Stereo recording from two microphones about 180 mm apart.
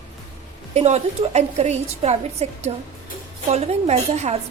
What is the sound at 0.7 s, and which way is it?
A woman's voice, 35° right (ahead or behind).